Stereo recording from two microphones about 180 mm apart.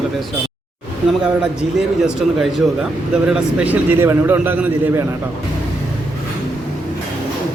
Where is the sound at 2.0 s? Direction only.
5° right (ahead or behind).